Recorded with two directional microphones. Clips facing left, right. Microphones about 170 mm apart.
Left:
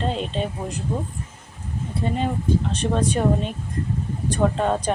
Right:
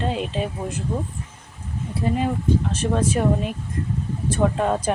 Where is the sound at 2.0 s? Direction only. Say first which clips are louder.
Right 3 dB; 30° left (ahead or behind).